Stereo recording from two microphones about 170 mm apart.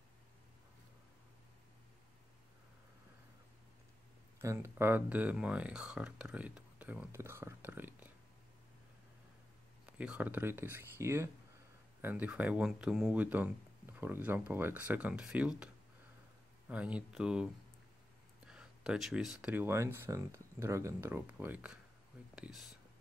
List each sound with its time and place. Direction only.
4.4 s speech: 15° right (ahead or behind)
9.9 s speech: 10° right (ahead or behind)
18.5 s speech: 5° right (ahead or behind)